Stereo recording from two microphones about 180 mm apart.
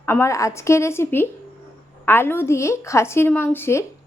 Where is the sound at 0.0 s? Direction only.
15° left (ahead or behind).